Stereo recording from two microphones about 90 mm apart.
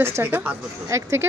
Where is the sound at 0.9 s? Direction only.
30° right (ahead or behind).